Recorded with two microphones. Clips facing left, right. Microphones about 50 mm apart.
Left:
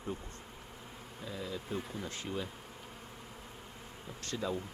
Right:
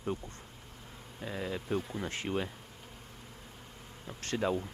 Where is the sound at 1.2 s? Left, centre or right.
Right.